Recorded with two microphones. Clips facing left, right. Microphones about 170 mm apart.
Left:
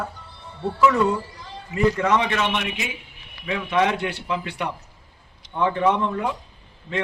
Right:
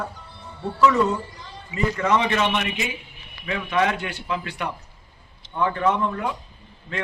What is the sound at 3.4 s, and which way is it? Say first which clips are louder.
A man's voice: left 1 dB; 10° left (ahead or behind).